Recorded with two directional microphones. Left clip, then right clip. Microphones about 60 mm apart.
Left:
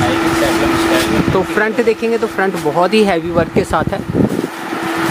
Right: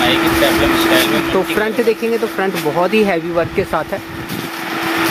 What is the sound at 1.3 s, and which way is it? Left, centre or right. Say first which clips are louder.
Speech: left 1 dB; left.